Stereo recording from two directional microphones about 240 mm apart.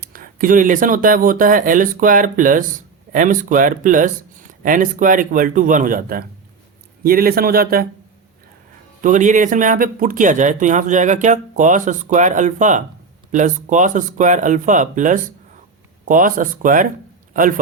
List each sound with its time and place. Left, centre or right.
0.0 s speech: right
9.0 s a man's voice: right